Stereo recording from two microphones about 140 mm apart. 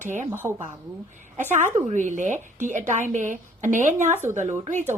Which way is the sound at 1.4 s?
60° right (ahead or behind).